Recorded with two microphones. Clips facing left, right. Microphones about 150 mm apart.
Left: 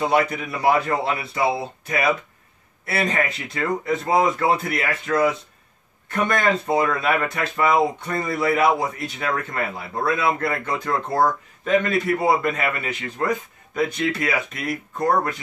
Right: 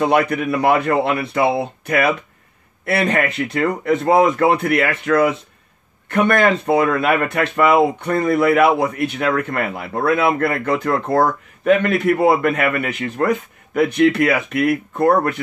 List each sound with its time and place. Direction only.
0.0 s speech: 60° right (ahead or behind)